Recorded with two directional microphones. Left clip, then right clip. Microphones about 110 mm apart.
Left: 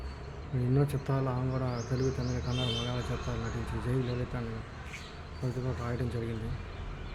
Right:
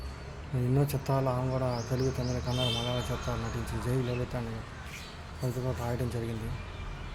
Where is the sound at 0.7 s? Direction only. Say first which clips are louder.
Right 2 dB; 25° left (ahead or behind).